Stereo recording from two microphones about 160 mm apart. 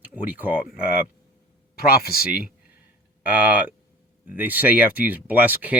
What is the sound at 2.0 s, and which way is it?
Speech, 70° left (ahead or behind).